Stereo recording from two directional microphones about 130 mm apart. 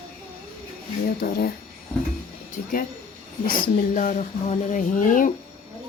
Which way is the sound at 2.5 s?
90° left.